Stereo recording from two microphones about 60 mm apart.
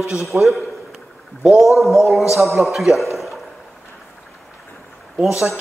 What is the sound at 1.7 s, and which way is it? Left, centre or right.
A man's voice, centre.